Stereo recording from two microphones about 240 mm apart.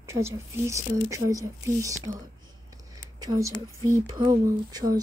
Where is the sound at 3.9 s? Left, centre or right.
Centre.